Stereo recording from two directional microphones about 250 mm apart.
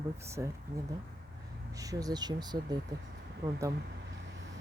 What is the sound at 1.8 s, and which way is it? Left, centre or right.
Speech, centre.